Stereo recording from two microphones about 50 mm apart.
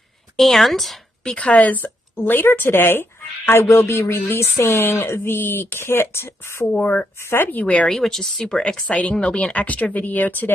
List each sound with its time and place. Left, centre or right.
0.4 s a woman's voice: centre
1.2 s speech: left
6.7 s speech: left
7.2 s speech: left
7.6 s speech: left
7.9 s speech: centre; by 10.5 s left